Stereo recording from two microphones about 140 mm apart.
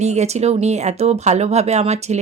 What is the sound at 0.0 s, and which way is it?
Speech, 55° right (ahead or behind).